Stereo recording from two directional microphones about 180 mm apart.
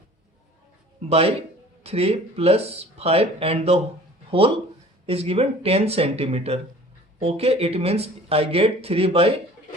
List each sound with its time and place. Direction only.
1.8 s speech: 35° right (ahead or behind)